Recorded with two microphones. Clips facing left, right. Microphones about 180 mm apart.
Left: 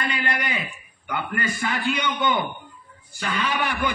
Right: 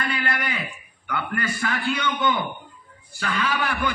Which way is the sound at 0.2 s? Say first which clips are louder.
Even; 20° left (ahead or behind).